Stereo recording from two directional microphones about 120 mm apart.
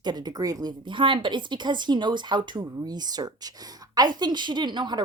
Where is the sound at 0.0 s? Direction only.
35° right (ahead or behind).